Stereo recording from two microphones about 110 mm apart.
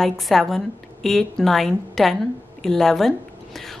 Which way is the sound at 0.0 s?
Centre (ahead or behind).